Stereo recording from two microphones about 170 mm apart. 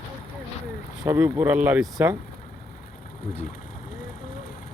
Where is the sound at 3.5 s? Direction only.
55° left (ahead or behind).